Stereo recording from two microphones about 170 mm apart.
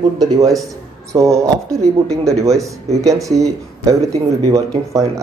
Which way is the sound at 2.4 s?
20° right (ahead or behind).